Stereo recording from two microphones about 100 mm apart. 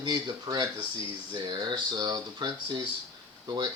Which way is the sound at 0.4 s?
35° right (ahead or behind).